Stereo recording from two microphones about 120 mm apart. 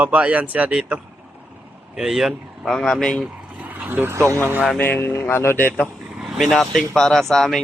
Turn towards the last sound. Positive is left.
turn(degrees=0)  # may be behind; listen again after turning